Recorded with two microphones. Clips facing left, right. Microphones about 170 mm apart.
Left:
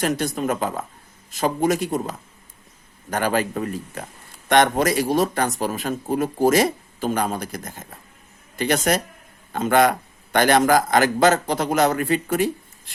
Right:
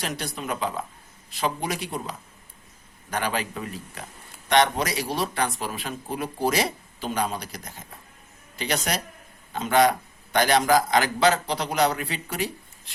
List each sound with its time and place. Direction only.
0.0 s a man's voice: 50° left (ahead or behind)